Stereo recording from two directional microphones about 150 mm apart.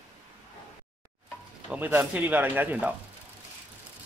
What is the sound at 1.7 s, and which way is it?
Speech, 10° right (ahead or behind).